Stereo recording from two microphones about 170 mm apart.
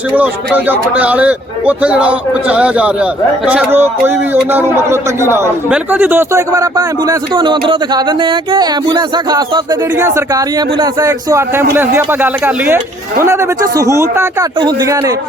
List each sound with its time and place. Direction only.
0.1 s a man's voice: 10° right (ahead or behind)